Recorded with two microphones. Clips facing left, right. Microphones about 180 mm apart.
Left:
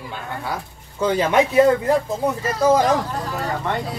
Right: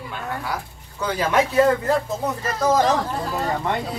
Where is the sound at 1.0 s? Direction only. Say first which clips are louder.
Left 3 dB; 25° left (ahead or behind).